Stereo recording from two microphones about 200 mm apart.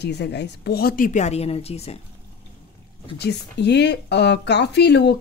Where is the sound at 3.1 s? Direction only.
55° left (ahead or behind).